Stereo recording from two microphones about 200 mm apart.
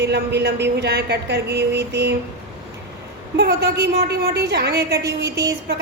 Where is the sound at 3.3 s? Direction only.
55° right (ahead or behind).